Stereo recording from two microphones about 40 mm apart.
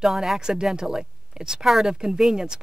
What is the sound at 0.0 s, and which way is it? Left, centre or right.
A woman's voice, centre.